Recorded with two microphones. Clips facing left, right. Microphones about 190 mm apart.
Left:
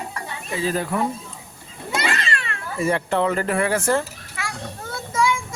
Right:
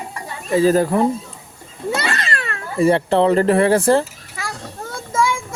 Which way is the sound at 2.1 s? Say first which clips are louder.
Right 2 dB; 35° right (ahead or behind).